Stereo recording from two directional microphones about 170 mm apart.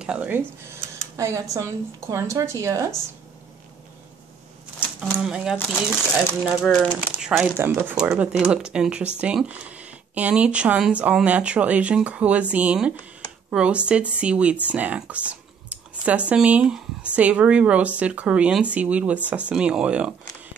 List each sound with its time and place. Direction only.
0.0 s speech: 5° right (ahead or behind)
1.1 s a woman's voice: 20° right (ahead or behind)
5.2 s speech: 5° right (ahead or behind)